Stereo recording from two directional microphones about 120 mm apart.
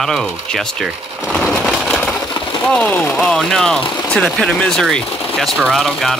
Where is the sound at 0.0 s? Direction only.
5° left (ahead or behind).